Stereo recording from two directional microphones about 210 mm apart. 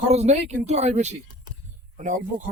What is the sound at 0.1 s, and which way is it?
Speech, 30° right (ahead or behind).